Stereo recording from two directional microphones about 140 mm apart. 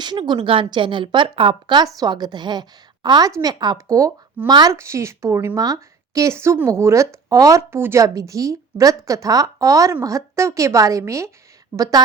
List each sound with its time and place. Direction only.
0.0 s a woman's voice: 30° right (ahead or behind)